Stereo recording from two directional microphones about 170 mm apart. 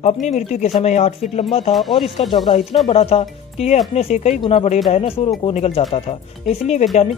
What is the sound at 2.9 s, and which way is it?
Speech, 35° left (ahead or behind).